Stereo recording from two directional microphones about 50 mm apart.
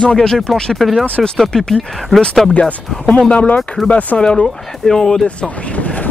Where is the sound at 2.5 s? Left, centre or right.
Left.